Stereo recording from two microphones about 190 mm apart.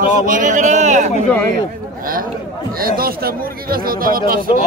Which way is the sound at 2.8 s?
50° right (ahead or behind).